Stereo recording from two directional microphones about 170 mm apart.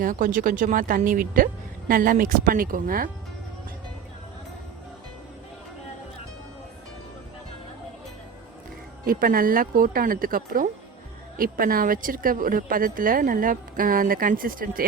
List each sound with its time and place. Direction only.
0.0 s speech: 55° right (ahead or behind)
9.0 s speech: 55° right (ahead or behind)